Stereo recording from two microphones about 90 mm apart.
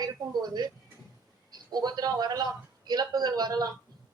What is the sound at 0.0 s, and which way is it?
Speech, 50° right (ahead or behind).